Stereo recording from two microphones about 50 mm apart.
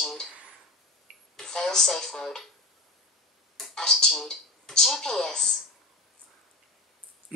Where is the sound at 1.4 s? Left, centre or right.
Centre.